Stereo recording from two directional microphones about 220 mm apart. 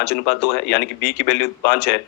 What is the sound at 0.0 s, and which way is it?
Speech, 50° left (ahead or behind).